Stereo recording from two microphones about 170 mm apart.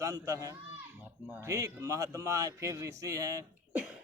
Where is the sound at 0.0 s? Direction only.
20° right (ahead or behind).